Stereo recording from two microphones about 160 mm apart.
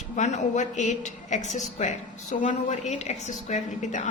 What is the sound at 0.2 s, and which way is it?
A woman's voice, 45° left (ahead or behind).